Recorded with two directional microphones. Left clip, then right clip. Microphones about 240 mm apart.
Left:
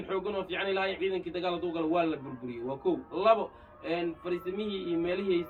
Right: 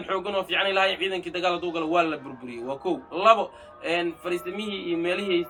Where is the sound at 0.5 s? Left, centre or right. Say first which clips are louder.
Right 9 dB; right.